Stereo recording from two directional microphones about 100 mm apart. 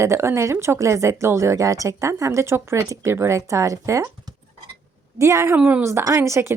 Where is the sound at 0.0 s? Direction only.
30° right (ahead or behind).